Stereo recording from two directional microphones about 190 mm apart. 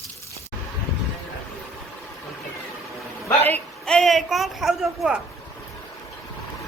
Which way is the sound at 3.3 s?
10° left (ahead or behind).